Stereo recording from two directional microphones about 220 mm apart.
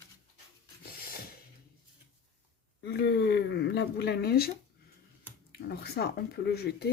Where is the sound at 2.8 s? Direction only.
50° left (ahead or behind).